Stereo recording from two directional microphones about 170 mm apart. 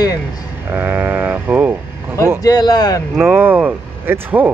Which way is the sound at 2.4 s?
25° left (ahead or behind).